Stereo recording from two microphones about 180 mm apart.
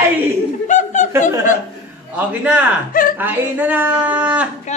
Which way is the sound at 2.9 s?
50° left (ahead or behind).